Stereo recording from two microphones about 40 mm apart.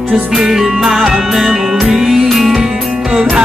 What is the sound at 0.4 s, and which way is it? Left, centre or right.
Music, centre.